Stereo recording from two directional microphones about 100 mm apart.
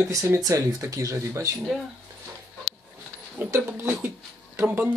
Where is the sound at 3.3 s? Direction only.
25° right (ahead or behind).